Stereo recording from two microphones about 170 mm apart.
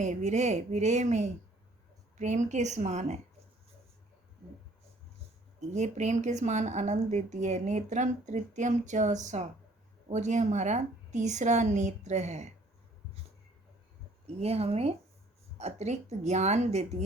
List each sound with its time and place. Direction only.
0.0 s speech: 45° right (ahead or behind)
5.5 s speech: 45° right (ahead or behind)
14.4 s speech: 35° right (ahead or behind)